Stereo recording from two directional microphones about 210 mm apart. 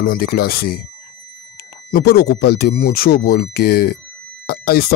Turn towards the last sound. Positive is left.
turn(degrees=45)  # may be behind; listen again after turning